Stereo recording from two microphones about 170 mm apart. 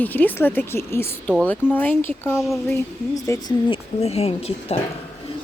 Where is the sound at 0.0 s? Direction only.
10° left (ahead or behind).